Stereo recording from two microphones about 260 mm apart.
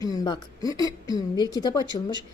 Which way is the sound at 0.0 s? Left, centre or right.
Centre.